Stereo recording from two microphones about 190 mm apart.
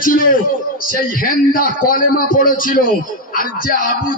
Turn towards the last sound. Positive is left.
turn(degrees=45)  # may be behind; listen again after turning